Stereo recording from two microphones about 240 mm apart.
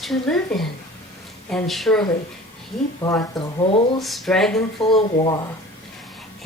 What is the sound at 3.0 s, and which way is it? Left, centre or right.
Speech, centre.